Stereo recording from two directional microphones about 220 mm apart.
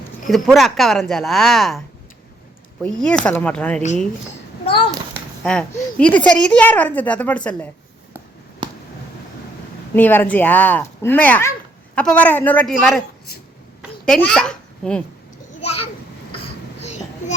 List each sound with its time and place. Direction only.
0.3 s a woman's voice: centre (ahead or behind)
2.8 s a woman's voice: 5° left (ahead or behind)
5.4 s a woman's voice: 5° left (ahead or behind)
8.6 s a sound: 20° right (ahead or behind)
9.9 s speech: 10° left (ahead or behind)
14.0 s a child's voice: 5° left (ahead or behind)
16.8 s child singing: 30° left (ahead or behind)